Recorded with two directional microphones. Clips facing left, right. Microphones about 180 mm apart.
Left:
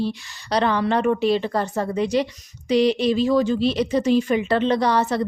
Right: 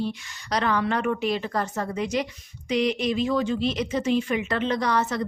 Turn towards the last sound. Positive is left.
turn(degrees=30)  # may be behind; listen again after turning